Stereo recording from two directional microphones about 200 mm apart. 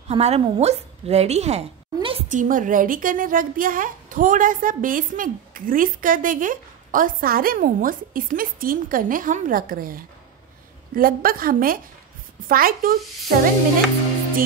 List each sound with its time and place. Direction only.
0.1 s speech: 30° right (ahead or behind)
2.2 s a woman's voice: 40° right (ahead or behind)